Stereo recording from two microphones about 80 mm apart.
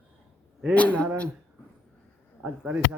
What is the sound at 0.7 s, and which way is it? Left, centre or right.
Speech, centre.